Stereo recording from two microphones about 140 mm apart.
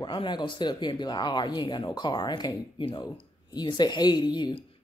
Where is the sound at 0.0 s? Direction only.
35° left (ahead or behind).